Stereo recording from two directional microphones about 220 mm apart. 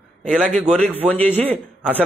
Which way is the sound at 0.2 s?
5° left (ahead or behind).